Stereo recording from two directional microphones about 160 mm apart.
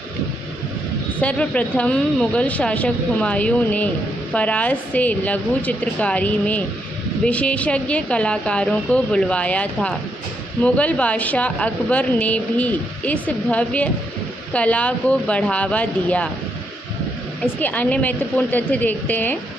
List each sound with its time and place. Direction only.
1.2 s a woman's voice: 10° left (ahead or behind)
17.6 s a woman's voice: 10° left (ahead or behind)